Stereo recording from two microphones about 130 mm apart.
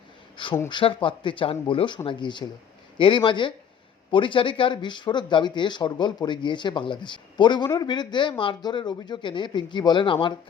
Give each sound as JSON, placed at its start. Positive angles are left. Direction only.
{"t": 0.7, "sound": "speech", "side_deg": 40}